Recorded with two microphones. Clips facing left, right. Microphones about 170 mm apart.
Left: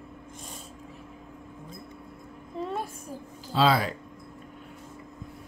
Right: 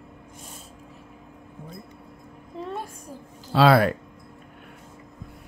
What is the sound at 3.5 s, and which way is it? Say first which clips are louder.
Speech: right 6 dB; 65° right (ahead or behind).